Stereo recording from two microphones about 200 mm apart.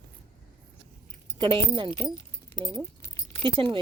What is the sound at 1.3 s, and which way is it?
Speech, 25° right (ahead or behind).